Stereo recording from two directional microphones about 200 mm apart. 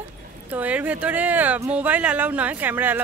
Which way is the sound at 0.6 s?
5° right (ahead or behind).